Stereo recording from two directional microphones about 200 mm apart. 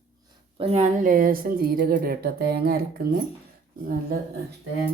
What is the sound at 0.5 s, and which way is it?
A woman's voice, 30° right (ahead or behind).